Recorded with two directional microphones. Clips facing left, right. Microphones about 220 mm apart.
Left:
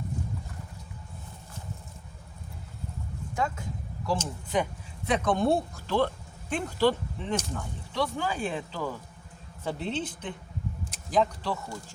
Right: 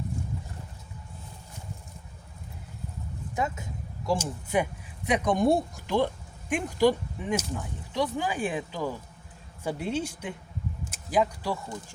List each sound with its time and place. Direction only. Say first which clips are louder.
3.3 s speech: even; 20° right (ahead or behind)
4.0 s speech: right 2 dB; 10° right (ahead or behind)